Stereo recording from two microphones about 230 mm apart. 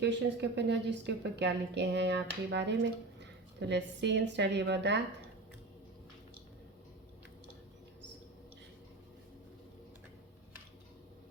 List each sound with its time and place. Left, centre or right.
0.0 s a woman's voice: right